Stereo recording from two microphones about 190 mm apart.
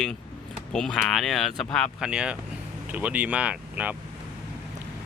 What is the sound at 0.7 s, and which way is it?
Speech, 5° left (ahead or behind).